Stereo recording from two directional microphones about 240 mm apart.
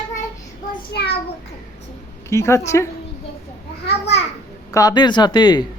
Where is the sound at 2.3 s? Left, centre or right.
Centre.